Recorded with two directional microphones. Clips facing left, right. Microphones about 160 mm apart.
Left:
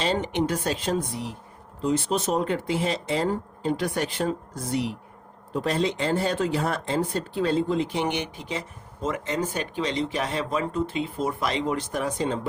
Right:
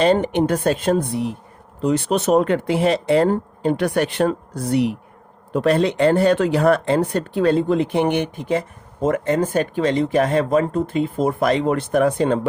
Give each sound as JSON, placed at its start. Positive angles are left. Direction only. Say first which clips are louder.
{"t": 0.0, "sound": "speech", "louder": "right 8 dB", "side_deg": -55}